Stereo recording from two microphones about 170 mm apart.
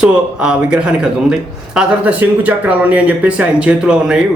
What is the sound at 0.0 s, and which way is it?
Speech, 5° right (ahead or behind).